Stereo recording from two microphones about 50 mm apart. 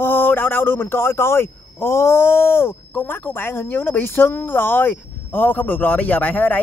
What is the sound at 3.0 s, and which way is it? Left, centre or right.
Speech, left.